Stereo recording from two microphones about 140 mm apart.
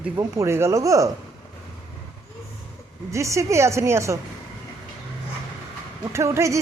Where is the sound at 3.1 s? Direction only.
20° right (ahead or behind).